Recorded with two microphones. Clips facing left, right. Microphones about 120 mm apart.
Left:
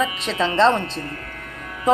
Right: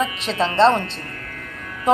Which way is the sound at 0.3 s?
35° right (ahead or behind).